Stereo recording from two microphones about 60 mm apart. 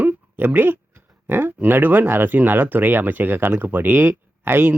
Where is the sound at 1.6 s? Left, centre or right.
Right.